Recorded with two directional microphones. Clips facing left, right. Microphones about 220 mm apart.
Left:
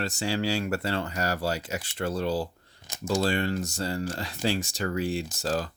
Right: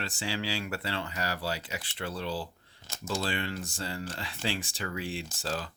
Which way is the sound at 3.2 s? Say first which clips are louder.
Left 7 dB; 40° left (ahead or behind).